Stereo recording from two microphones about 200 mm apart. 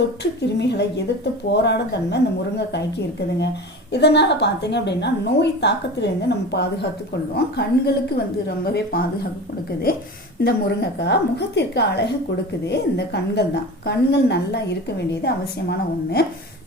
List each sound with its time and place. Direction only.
0.2 s a woman's voice: 60° left (ahead or behind)
3.9 s a woman's voice: 60° left (ahead or behind)
10.4 s a woman's voice: 55° left (ahead or behind)